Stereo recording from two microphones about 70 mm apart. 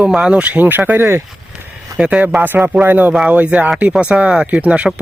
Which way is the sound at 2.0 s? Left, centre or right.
Centre.